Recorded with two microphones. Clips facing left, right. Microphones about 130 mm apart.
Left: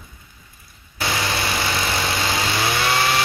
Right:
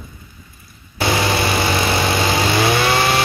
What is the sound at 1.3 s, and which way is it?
Vehicle, 60° right (ahead or behind).